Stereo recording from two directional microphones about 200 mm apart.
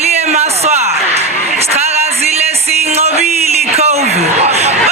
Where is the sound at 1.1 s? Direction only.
30° right (ahead or behind).